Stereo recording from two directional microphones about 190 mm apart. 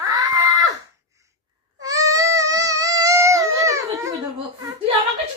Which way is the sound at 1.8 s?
20° right (ahead or behind).